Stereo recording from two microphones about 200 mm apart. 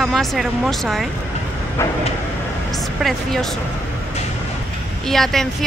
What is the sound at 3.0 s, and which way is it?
Speech, centre (ahead or behind).